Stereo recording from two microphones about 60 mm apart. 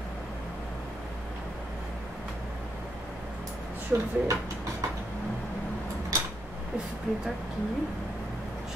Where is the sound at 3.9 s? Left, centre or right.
Right.